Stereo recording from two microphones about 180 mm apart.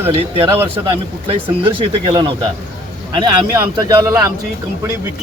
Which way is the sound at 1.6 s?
25° right (ahead or behind).